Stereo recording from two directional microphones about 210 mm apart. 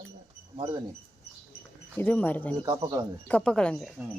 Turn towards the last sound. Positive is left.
turn(degrees=5)  # may be behind; listen again after turning